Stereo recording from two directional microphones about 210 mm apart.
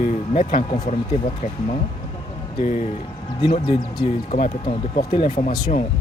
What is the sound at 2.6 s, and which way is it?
Speech, 30° left (ahead or behind).